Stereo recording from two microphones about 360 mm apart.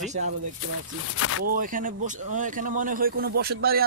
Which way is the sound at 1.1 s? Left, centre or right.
Left.